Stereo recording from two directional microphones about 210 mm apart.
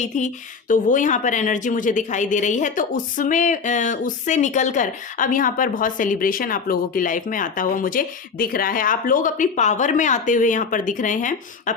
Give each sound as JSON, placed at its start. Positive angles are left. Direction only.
{"t": 0.1, "sound": "a woman's voice", "side_deg": 35}